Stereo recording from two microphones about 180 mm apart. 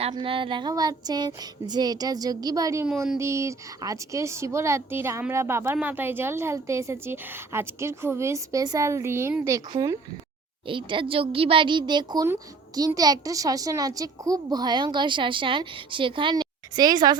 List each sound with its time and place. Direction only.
0.0 s speech: 30° right (ahead or behind)